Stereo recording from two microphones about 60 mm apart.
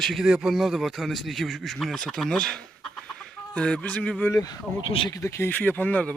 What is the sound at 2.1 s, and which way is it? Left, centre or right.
Chicken, centre.